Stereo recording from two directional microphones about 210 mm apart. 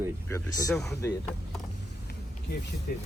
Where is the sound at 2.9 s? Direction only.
45° left (ahead or behind).